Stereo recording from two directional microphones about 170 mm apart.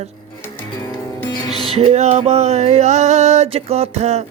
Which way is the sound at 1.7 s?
35° right (ahead or behind).